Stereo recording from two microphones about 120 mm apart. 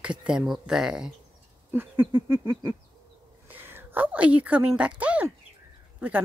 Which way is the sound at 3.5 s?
15° right (ahead or behind).